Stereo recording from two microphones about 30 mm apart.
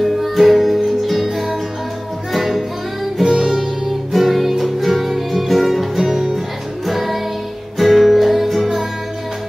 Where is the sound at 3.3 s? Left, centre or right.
Centre.